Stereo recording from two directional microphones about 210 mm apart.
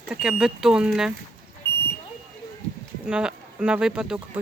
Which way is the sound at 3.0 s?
5° right (ahead or behind).